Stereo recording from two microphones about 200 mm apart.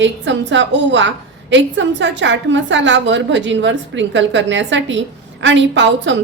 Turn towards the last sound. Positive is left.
turn(degrees=-65)  # may be behind; listen again after turning